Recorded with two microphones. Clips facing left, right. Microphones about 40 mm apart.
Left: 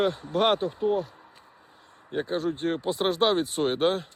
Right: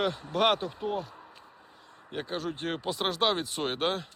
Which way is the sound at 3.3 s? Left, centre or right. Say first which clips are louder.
Left 6 dB; right.